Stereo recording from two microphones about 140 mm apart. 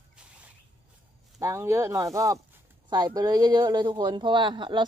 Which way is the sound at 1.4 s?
20° right (ahead or behind).